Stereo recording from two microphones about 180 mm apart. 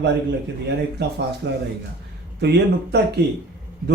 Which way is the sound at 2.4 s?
65° right (ahead or behind).